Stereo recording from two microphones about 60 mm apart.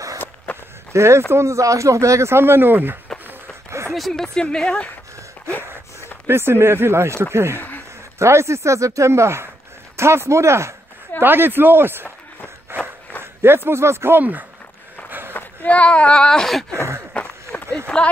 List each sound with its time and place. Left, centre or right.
0.5 s walk: left
0.9 s speech: right
3.9 s speech: centre
5.5 s a sound: left
6.2 s speech: right
11.1 s speech: right
12.7 s walk: right
13.2 s speech: right
15.0 s run: right
15.3 s speech: left; by 16.6 s centre
17.1 s run: left
17.9 s speech: centre